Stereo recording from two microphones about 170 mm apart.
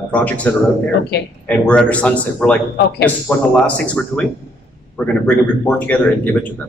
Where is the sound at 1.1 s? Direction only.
70° left (ahead or behind).